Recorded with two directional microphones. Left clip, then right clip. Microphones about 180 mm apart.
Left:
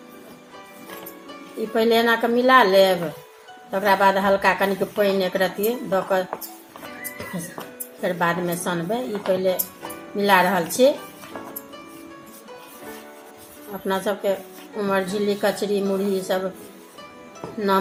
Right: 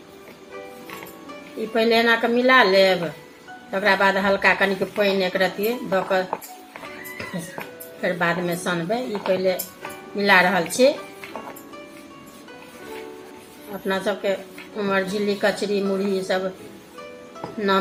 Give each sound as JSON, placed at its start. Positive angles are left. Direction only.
{"t": 1.7, "sound": "a woman's voice", "side_deg": 0}
{"t": 8.0, "sound": "a woman's voice", "side_deg": 5}
{"t": 13.8, "sound": "a woman's voice", "side_deg": 5}